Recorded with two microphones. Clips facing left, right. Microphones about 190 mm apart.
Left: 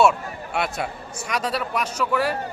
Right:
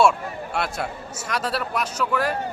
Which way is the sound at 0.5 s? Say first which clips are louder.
Left 2 dB; 5° left (ahead or behind).